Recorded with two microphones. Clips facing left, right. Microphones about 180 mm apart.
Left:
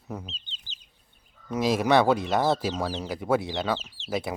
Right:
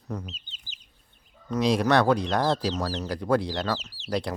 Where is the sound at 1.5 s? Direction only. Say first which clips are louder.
Even; 5° left (ahead or behind).